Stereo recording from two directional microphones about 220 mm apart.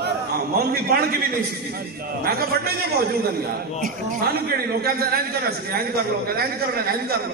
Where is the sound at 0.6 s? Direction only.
45° right (ahead or behind).